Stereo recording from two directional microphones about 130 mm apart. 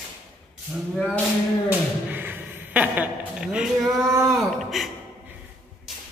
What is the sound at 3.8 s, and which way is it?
Speech, 25° right (ahead or behind).